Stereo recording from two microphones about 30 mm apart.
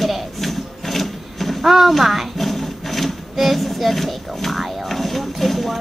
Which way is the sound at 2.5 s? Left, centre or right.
Centre.